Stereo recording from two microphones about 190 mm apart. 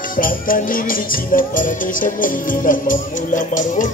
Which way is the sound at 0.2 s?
45° left (ahead or behind).